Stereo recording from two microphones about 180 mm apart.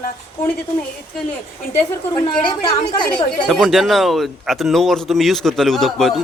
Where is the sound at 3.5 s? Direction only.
Centre (ahead or behind).